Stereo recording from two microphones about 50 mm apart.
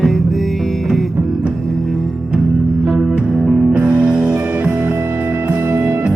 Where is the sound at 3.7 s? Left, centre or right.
Right.